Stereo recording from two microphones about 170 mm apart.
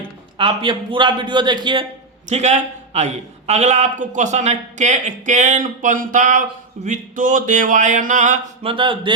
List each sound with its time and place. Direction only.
0.3 s a man's voice: 30° right (ahead or behind)
2.3 s a man's voice: 40° right (ahead or behind)
8.6 s speech: 30° right (ahead or behind)